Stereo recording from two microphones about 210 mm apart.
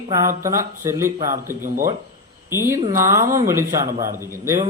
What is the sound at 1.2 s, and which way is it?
Speech, 40° right (ahead or behind).